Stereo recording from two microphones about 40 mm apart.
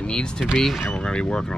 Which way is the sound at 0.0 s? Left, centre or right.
Left.